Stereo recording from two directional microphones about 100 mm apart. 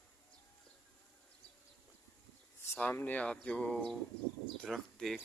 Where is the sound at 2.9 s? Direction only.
15° left (ahead or behind).